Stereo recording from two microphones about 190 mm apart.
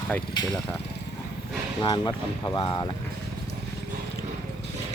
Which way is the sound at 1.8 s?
25° left (ahead or behind).